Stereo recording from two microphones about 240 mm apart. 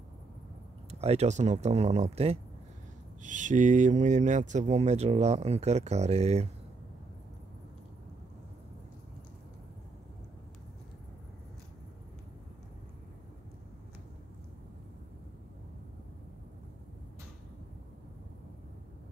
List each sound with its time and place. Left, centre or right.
0.9 s speech: right